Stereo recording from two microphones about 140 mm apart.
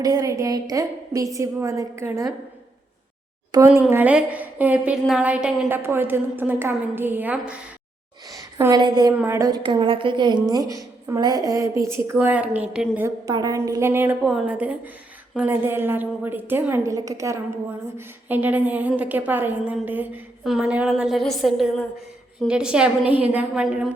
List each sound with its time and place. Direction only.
0.0 s a woman's voice: 25° right (ahead or behind)
3.8 s a woman's voice: 15° right (ahead or behind)
8.3 s a woman's voice: 25° right (ahead or behind)
9.6 s a woman's voice: 35° right (ahead or behind); by 13.1 s 5° right (ahead or behind)
13.3 s a woman's voice: 25° right (ahead or behind); by 23.9 s 5° right (ahead or behind)